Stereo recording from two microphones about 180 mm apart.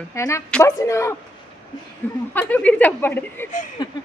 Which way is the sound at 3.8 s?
20° left (ahead or behind).